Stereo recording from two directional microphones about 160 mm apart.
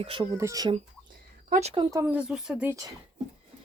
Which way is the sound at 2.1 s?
5° right (ahead or behind).